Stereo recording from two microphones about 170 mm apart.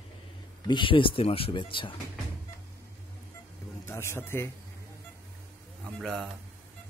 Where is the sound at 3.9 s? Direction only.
15° left (ahead or behind).